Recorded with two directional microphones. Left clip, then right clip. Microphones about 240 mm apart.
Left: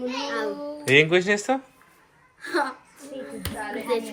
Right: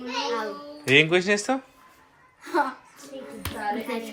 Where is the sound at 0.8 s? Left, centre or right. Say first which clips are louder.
Left 1 dB; centre.